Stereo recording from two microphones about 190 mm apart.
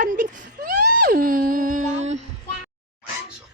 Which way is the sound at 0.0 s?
45° right (ahead or behind).